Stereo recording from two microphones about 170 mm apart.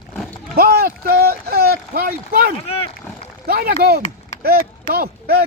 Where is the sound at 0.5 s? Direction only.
65° right (ahead or behind).